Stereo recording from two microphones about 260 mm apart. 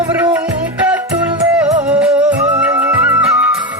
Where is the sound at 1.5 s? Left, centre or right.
Centre.